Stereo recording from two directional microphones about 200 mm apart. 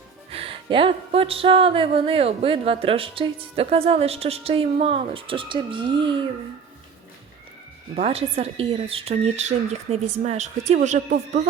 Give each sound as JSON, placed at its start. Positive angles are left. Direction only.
{"t": 0.3, "sound": "music", "side_deg": -30}
{"t": 7.9, "sound": "speech", "side_deg": -30}